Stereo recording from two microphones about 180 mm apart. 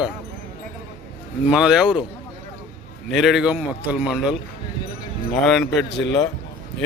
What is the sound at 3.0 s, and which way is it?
Speech, centre (ahead or behind).